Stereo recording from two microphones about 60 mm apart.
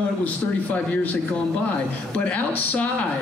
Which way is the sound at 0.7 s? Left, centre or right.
Left.